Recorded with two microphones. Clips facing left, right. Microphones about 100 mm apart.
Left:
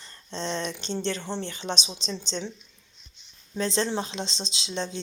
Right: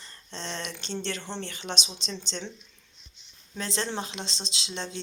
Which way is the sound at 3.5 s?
20° left (ahead or behind).